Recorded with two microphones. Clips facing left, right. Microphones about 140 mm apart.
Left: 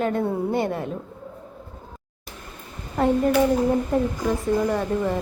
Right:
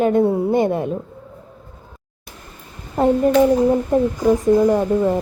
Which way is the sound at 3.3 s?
20° right (ahead or behind).